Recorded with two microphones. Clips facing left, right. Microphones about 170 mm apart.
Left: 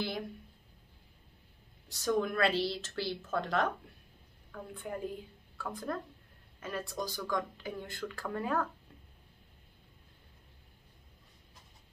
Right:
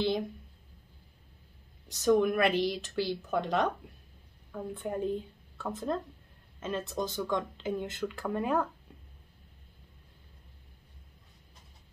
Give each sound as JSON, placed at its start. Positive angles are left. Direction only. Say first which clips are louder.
{"t": 1.9, "sound": "a woman's voice", "louder": "right 6 dB", "side_deg": -20}